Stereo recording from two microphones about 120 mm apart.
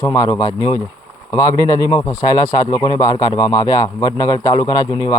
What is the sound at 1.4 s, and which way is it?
A man's voice, 25° left (ahead or behind).